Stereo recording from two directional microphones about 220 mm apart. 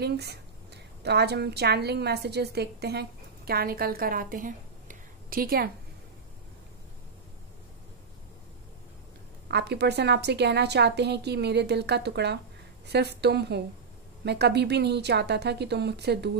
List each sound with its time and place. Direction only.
0.0 s a woman's voice: 50° right (ahead or behind)
9.5 s a woman's voice: 50° right (ahead or behind)